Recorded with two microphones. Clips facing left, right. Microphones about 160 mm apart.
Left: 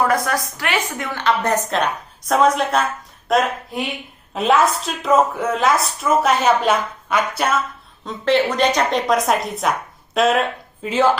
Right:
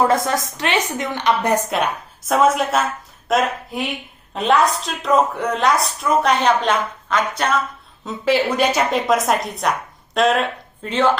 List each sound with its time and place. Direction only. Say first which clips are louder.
0.0 s a woman's voice: right 1 dB; 25° right (ahead or behind); by 7.6 s 10° left (ahead or behind)
8.0 s speech: left 1 dB; 5° right (ahead or behind)